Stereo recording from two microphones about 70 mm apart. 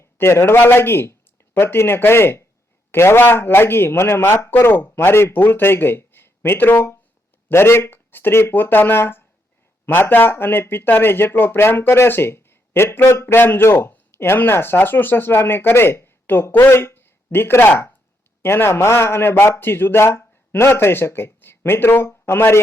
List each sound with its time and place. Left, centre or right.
0.0 s a man's voice: left